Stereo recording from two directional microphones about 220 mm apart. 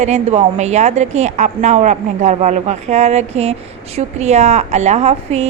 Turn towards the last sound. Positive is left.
turn(degrees=-30)  # may be behind; listen again after turning